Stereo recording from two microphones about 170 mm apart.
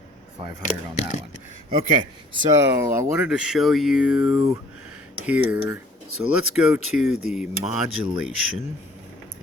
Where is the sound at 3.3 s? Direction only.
5° right (ahead or behind).